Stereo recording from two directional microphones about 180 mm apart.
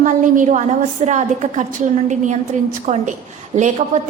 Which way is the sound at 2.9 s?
45° right (ahead or behind).